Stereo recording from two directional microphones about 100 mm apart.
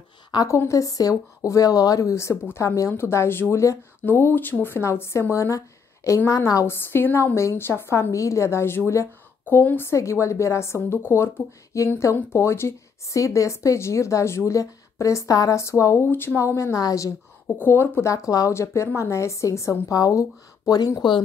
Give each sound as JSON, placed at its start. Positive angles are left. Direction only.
{"t": 0.5, "sound": "speech", "side_deg": 30}